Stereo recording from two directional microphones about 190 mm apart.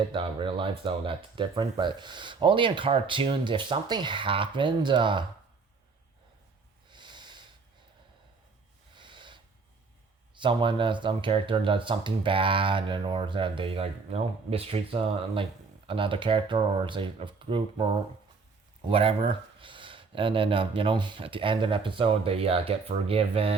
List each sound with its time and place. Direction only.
0.1 s speech: 25° right (ahead or behind)
6.9 s snort: 25° right (ahead or behind)
9.0 s snort: 25° right (ahead or behind)
10.3 s speech: 25° right (ahead or behind)